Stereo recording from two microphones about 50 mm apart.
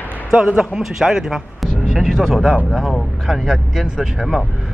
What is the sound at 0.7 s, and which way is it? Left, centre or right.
A man's voice, centre.